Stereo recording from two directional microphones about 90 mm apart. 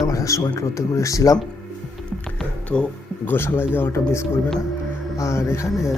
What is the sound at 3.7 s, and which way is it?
Speech, 25° left (ahead or behind).